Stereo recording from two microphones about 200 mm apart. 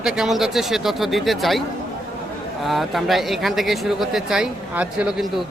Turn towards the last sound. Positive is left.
turn(degrees=0)  # may be behind; listen again after turning